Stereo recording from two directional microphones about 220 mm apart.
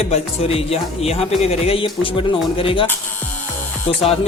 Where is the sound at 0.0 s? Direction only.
25° left (ahead or behind).